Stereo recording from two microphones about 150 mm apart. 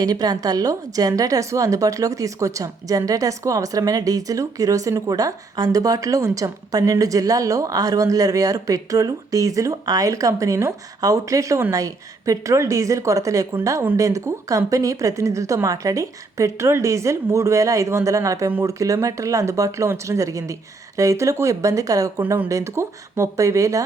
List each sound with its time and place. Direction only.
0.0 s a woman's voice: 25° right (ahead or behind)